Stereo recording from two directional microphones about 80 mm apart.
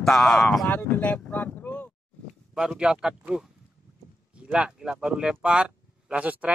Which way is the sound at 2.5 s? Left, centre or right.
Centre.